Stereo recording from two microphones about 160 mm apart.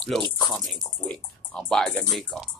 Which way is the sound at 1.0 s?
5° left (ahead or behind).